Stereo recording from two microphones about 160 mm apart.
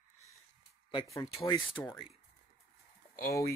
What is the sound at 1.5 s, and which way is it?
Speech, 30° left (ahead or behind).